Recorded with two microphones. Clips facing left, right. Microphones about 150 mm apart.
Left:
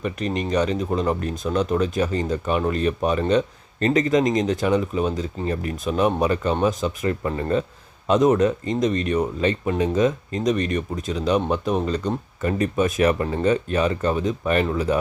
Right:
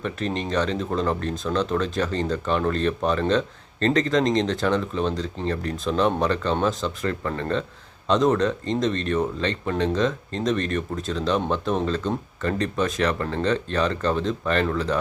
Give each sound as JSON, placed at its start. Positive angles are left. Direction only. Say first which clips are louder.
{"t": 0.0, "sound": "speech", "louder": "left 2 dB", "side_deg": 5}
{"t": 7.0, "sound": "speech", "louder": "left 2 dB", "side_deg": 15}
{"t": 8.4, "sound": "speech", "louder": "left 3 dB", "side_deg": 5}